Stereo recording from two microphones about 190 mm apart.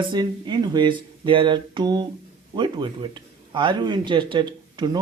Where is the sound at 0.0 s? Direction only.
25° right (ahead or behind).